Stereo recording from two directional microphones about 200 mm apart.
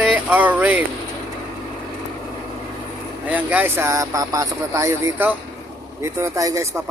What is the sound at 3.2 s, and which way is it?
Speech, 5° right (ahead or behind).